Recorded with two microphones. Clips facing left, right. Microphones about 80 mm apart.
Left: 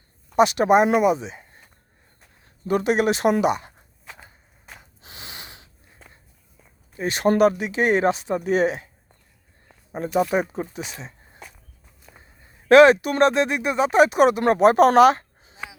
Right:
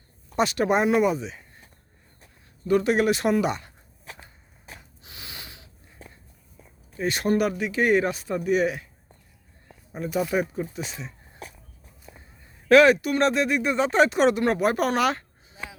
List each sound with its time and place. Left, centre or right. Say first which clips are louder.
0.3 s speech: left 6 dB; left
2.6 s speech: left 1 dB; left
5.0 s snort: left 2 dB; left
6.9 s speech: left 3 dB; left
10.0 s speech: left 4 dB; left
12.6 s speech: left 4 dB; left
14.9 s a sound: left 10 dB; left